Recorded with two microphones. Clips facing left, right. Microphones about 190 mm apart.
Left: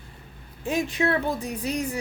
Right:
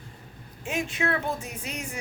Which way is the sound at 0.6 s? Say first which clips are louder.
Left 4 dB; 35° left (ahead or behind).